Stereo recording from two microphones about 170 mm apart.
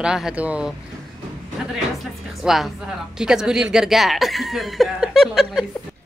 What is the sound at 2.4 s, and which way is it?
Speech, centre (ahead or behind).